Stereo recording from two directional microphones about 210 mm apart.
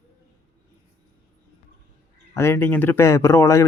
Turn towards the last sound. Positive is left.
turn(degrees=15)  # may be behind; listen again after turning